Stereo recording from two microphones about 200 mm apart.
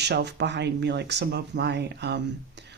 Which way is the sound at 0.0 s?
55° right (ahead or behind).